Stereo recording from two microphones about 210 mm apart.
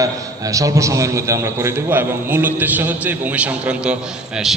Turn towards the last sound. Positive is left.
turn(degrees=-5)  # may be behind; listen again after turning